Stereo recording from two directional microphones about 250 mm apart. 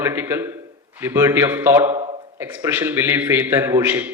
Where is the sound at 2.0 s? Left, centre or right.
Right.